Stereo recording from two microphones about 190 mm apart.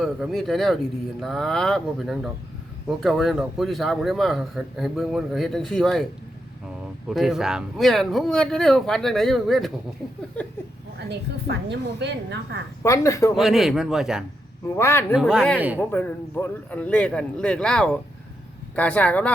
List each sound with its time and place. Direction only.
0.0 s speech: centre (ahead or behind)
7.1 s speech: centre (ahead or behind)
11.1 s a woman's voice: 60° right (ahead or behind)
12.8 s speech: 15° left (ahead or behind)
13.3 s speech: centre (ahead or behind)
14.8 s speech: 15° left (ahead or behind)
15.1 s speech: 5° right (ahead or behind)
15.8 s speech: 10° left (ahead or behind)